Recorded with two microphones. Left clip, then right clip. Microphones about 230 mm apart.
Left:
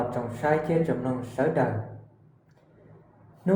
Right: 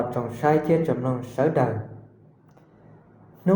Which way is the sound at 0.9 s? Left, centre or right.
Right.